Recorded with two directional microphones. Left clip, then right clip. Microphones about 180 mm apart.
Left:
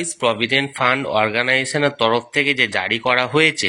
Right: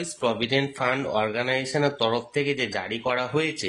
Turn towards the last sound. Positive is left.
turn(degrees=20)  # may be behind; listen again after turning